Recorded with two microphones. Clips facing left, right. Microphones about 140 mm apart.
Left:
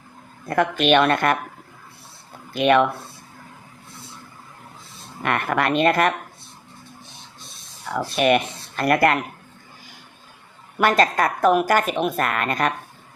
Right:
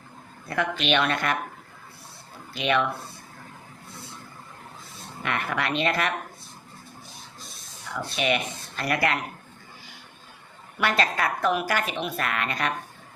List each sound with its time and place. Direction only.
0.4 s a woman's voice: 50° left (ahead or behind)
2.5 s speech: 50° left (ahead or behind)
5.2 s a woman's voice: 55° left (ahead or behind)
8.1 s a woman's voice: 50° left (ahead or behind)
10.8 s a woman's voice: 45° left (ahead or behind)